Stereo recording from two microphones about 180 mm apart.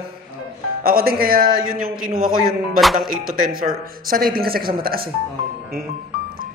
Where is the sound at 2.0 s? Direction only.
5° right (ahead or behind).